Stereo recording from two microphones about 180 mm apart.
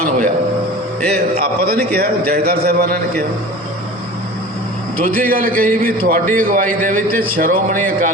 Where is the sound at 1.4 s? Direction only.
55° right (ahead or behind).